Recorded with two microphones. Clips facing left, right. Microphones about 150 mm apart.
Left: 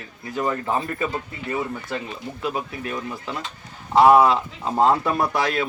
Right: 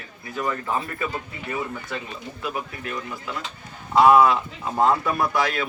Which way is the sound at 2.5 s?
25° left (ahead or behind).